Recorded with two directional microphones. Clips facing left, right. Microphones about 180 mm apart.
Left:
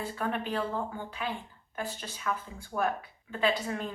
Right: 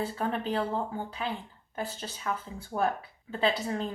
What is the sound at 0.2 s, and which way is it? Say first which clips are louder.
A woman's voice: even; 30° right (ahead or behind).